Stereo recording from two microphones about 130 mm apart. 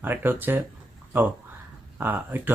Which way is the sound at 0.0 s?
15° right (ahead or behind).